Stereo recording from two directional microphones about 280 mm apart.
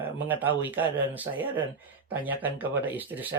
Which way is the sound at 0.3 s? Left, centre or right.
Centre.